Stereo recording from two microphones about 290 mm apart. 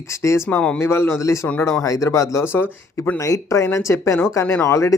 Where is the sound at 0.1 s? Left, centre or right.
Centre.